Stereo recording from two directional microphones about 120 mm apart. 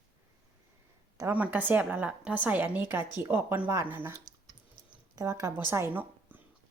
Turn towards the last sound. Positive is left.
turn(degrees=-15)  # may be behind; listen again after turning